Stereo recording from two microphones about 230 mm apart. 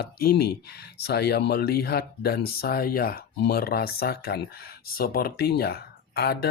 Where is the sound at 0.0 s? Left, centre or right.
Left.